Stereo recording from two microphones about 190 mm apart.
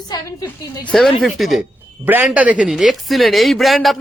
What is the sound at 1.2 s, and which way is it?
Speech, centre (ahead or behind).